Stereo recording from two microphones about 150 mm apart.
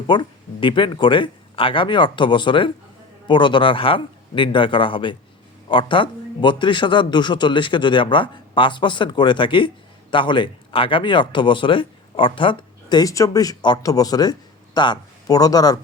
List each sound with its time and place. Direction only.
0.1 s a man's voice: 30° left (ahead or behind)